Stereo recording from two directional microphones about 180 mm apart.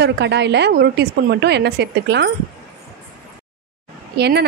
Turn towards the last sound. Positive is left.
turn(degrees=-65)  # may be behind; listen again after turning